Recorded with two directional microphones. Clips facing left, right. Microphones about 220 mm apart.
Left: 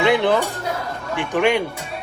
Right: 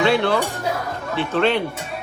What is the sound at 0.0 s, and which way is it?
Dishes, 15° left (ahead or behind).